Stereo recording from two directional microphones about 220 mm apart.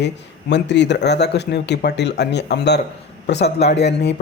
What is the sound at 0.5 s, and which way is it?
Speech, 50° left (ahead or behind).